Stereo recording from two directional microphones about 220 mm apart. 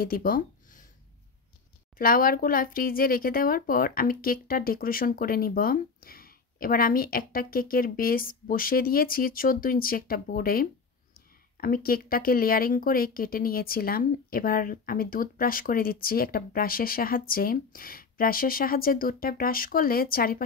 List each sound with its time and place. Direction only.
0.0 s speech: 40° left (ahead or behind)
2.0 s speech: 40° left (ahead or behind)